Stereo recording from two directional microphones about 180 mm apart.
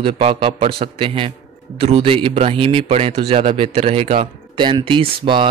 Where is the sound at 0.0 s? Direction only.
30° right (ahead or behind).